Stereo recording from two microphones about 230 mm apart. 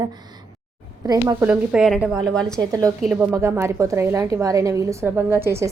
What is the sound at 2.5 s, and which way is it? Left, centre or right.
Speech, centre.